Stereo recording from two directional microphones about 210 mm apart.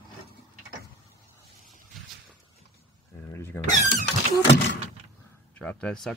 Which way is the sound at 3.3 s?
10° left (ahead or behind).